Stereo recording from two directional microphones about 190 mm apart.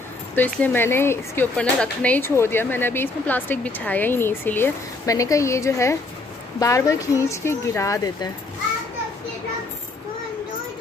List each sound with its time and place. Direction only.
0.4 s a woman's voice: 10° left (ahead or behind)